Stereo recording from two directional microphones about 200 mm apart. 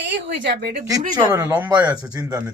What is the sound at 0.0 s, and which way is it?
Speech, 60° right (ahead or behind).